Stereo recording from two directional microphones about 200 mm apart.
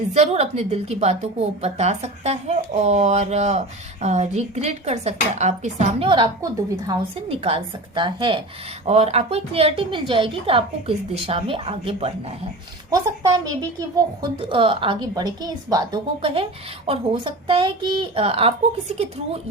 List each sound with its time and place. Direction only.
0.1 s a woman's voice: 30° right (ahead or behind)
7.3 s a woman's voice: 30° right (ahead or behind)
12.9 s a woman's voice: 20° right (ahead or behind)